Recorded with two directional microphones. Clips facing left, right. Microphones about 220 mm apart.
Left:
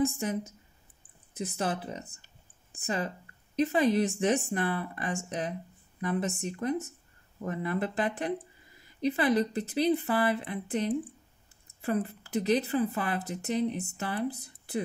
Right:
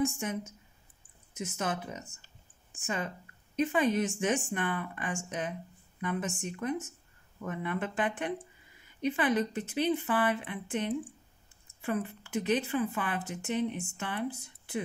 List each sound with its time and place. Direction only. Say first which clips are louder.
0.0 s speech: left 3 dB; 35° left (ahead or behind)